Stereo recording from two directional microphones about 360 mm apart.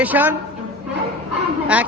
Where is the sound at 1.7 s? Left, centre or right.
Centre.